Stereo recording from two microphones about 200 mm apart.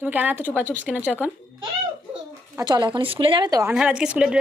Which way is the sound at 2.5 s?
20° right (ahead or behind).